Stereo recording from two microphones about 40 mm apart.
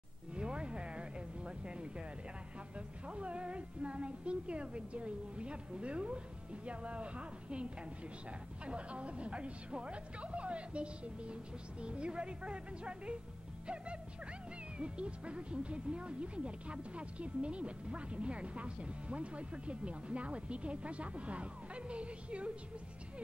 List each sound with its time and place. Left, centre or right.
0.4 s music: right
3.1 s speech: right
14.8 s speech: right